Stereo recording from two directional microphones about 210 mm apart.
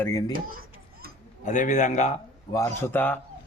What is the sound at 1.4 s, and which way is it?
Speech, 35° left (ahead or behind).